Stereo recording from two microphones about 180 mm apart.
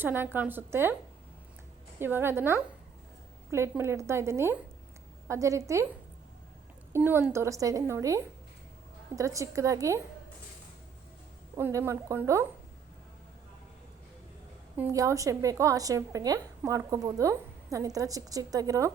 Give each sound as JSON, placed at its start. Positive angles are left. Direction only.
{"t": 0.0, "sound": "a woman's voice", "side_deg": -10}
{"t": 2.0, "sound": "a woman's voice", "side_deg": -10}
{"t": 6.9, "sound": "a woman's voice", "side_deg": -10}
{"t": 11.5, "sound": "a woman's voice", "side_deg": -15}
{"t": 14.8, "sound": "a woman's voice", "side_deg": -15}